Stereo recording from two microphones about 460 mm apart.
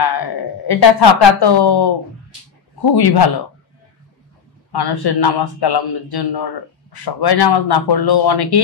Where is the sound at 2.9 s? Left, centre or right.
Left.